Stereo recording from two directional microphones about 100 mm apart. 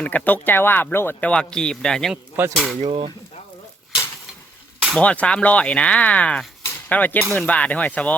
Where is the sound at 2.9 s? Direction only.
60° right (ahead or behind).